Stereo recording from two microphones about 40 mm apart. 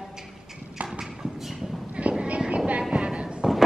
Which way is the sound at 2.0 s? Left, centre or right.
Right.